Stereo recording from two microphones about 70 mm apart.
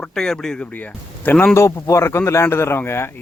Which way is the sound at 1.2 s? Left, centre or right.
Left.